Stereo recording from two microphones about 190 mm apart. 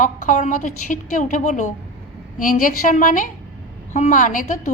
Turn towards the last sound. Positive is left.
turn(degrees=45)  # may be behind; listen again after turning